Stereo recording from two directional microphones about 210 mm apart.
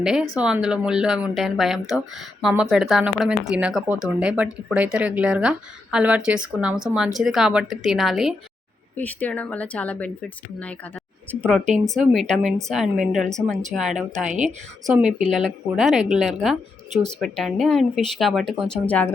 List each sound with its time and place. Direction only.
0.0 s speech: 5° right (ahead or behind)
14.3 s speech: 35° right (ahead or behind)
14.8 s speech: centre (ahead or behind)